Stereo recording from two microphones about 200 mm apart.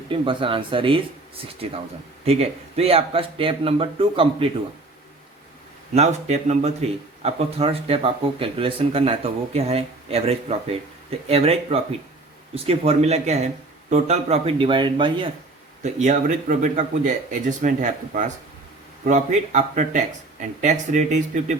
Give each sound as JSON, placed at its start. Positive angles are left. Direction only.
{"t": 0.1, "sound": "speech", "side_deg": -25}
{"t": 2.2, "sound": "speech", "side_deg": -30}
{"t": 5.9, "sound": "speech", "side_deg": -35}
{"t": 15.8, "sound": "speech", "side_deg": -35}